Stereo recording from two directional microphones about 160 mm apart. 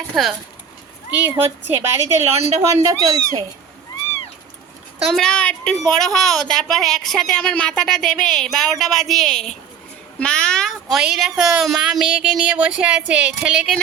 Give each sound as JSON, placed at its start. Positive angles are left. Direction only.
{"t": 0.1, "sound": "a woman's voice", "side_deg": 0}
{"t": 1.4, "sound": "a woman's voice", "side_deg": -15}
{"t": 5.1, "sound": "a woman's voice", "side_deg": 5}